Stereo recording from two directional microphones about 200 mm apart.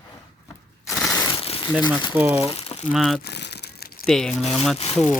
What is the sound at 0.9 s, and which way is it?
Mechanisms, centre (ahead or behind).